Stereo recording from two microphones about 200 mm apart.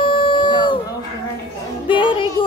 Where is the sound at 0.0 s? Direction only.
25° left (ahead or behind).